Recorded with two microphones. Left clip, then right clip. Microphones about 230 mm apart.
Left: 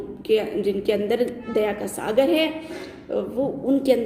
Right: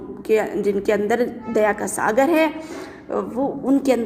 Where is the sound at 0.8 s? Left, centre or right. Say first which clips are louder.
Right 2 dB; right.